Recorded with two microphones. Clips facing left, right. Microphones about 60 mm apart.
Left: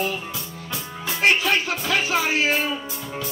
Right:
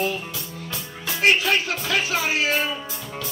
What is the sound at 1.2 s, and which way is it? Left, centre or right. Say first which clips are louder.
Music: even; left.